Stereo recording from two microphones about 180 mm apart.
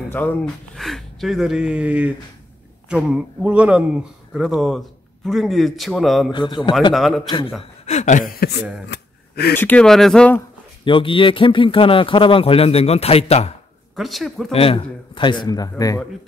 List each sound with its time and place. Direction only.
0.1 s speech: 10° left (ahead or behind)
6.3 s speech: 25° left (ahead or behind)
6.9 s speech: centre (ahead or behind)
7.2 s speech: 30° left (ahead or behind)
7.8 s speech: 40° left (ahead or behind); by 8.6 s 60° left (ahead or behind)
8.8 s a sound: 65° left (ahead or behind)
9.6 s speech: 10° left (ahead or behind)
10.8 s speech: 25° left (ahead or behind)
13.9 s speech: centre (ahead or behind)
14.5 s speech: 35° left (ahead or behind)